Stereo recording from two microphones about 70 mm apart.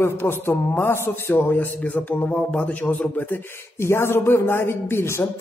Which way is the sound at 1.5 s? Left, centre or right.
Left.